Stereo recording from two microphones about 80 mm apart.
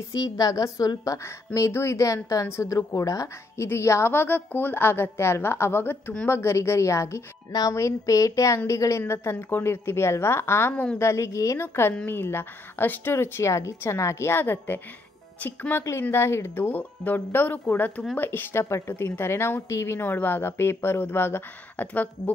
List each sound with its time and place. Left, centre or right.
0.1 s a woman's voice: left
16.0 s a woman's voice: left